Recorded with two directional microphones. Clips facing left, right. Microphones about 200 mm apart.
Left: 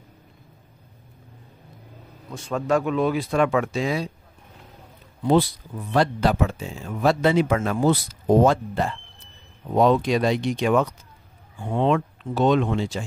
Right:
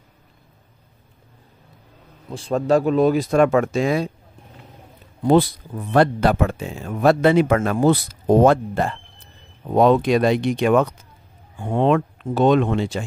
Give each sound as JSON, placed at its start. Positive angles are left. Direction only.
{"t": 2.3, "sound": "speech", "side_deg": -35}
{"t": 5.2, "sound": "speech", "side_deg": -50}